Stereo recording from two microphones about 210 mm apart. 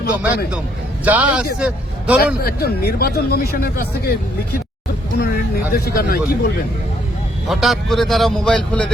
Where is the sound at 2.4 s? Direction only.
45° left (ahead or behind).